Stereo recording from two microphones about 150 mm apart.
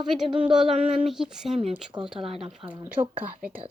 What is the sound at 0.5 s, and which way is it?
Speech, 5° right (ahead or behind).